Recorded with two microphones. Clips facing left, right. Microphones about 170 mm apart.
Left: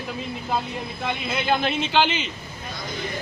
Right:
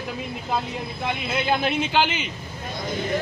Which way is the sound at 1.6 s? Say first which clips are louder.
Even; 10° right (ahead or behind).